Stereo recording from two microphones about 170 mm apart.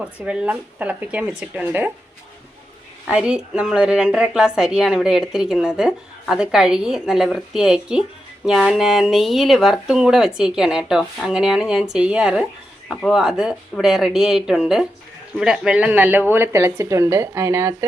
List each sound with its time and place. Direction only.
0.0 s speech: 5° right (ahead or behind)
3.1 s speech: 5° right (ahead or behind)